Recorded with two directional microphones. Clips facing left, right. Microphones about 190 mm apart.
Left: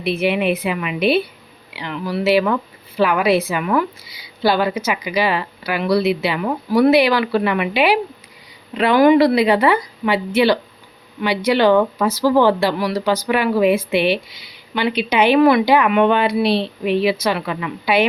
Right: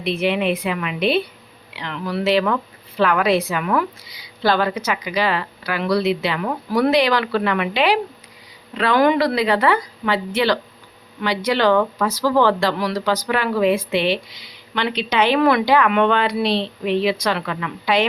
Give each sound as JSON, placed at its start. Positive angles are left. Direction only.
{"t": 0.0, "sound": "speech", "side_deg": 5}